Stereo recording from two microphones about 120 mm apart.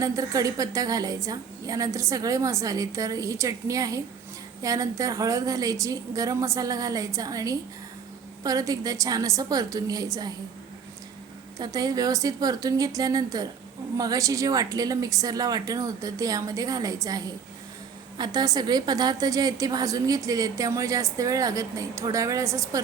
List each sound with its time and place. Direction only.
0.0 s a woman's voice: 30° right (ahead or behind)
11.5 s a woman's voice: 30° right (ahead or behind)